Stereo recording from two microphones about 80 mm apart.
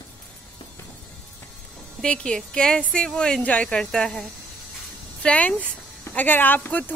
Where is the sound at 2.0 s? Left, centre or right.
Centre.